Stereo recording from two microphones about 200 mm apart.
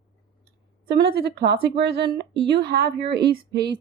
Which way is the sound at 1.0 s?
55° right (ahead or behind).